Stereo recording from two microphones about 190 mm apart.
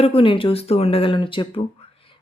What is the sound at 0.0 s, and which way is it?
Speech, 30° left (ahead or behind).